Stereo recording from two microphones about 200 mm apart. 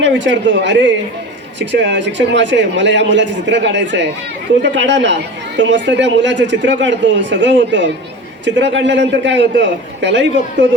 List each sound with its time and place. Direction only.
0.0 s speech: 65° right (ahead or behind)